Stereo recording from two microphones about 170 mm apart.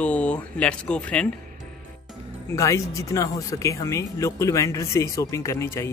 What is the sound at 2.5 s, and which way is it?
Speech, 15° left (ahead or behind).